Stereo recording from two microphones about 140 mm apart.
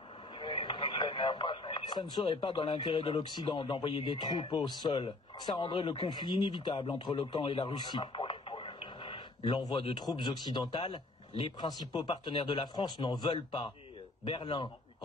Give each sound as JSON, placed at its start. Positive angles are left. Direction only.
{"t": 0.3, "sound": "radio", "side_deg": 35}
{"t": 3.3, "sound": "speech", "side_deg": 35}